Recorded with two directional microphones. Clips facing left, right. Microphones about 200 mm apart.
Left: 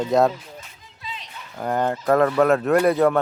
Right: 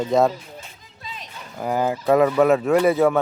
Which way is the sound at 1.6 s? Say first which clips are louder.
Right 1 dB; 5° right (ahead or behind).